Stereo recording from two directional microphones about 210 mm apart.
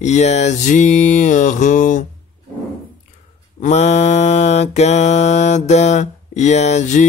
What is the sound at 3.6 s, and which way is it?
Mantra, 35° left (ahead or behind).